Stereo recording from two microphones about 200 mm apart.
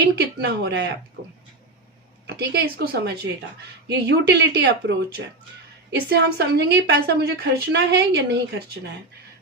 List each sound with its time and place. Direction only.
0.2 s a woman's voice: 55° right (ahead or behind)
2.2 s a woman's voice: 55° right (ahead or behind)
5.9 s a woman's voice: 55° right (ahead or behind)